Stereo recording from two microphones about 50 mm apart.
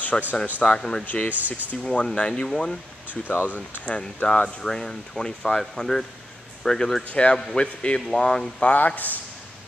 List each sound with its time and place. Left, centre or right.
0.1 s speech: centre
1.0 s speech: left
1.3 s speech: right
1.8 s speech: centre
3.3 s speech: left
3.8 s speech: left
7.1 s speech: left
8.6 s speech: left